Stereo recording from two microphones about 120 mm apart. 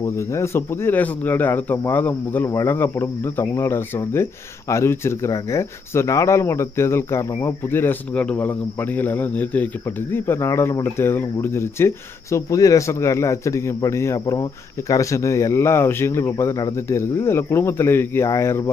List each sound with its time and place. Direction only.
0.0 s speech: 25° left (ahead or behind)